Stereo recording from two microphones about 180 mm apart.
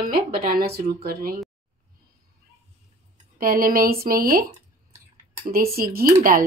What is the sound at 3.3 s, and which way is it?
A woman's voice, 50° right (ahead or behind).